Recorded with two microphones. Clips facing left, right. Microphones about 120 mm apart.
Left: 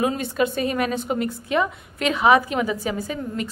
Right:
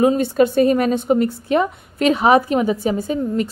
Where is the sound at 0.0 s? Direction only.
35° right (ahead or behind).